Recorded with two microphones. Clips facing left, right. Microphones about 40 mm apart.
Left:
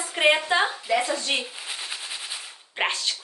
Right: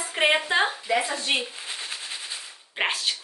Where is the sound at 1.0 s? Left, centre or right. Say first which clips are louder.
Even; right.